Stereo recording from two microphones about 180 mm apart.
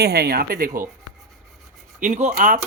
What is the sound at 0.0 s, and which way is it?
Speech, 65° right (ahead or behind).